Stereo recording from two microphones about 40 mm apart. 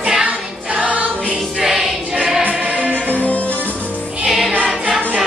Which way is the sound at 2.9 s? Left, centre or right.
Left.